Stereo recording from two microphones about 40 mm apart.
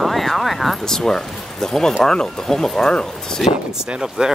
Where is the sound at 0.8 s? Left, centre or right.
Centre.